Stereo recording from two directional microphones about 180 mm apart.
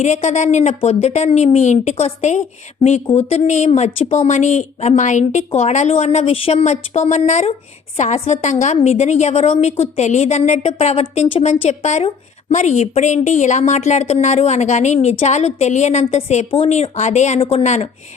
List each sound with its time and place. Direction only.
0.0 s a woman's voice: 40° left (ahead or behind)